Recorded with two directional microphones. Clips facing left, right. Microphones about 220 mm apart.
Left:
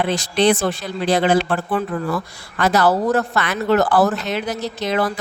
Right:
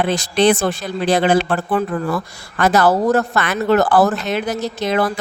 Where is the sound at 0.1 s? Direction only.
50° right (ahead or behind).